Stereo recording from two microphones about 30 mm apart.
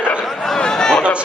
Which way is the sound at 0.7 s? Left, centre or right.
Left.